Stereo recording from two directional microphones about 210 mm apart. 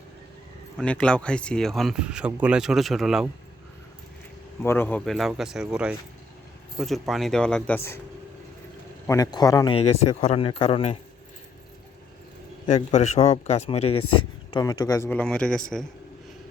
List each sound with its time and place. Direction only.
0.8 s speech: 5° left (ahead or behind)
4.6 s speech: 10° left (ahead or behind)
9.0 s speech: 15° left (ahead or behind)
12.6 s a man's voice: 35° left (ahead or behind)
14.5 s speech: 15° left (ahead or behind)